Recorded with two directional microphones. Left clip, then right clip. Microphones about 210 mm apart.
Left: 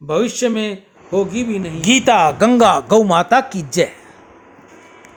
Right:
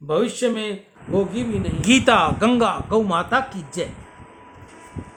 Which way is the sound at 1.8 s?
15° left (ahead or behind).